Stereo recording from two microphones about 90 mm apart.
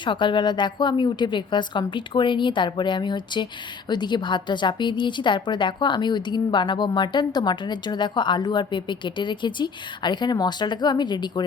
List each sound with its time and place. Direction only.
0.0 s a woman's voice: 65° left (ahead or behind)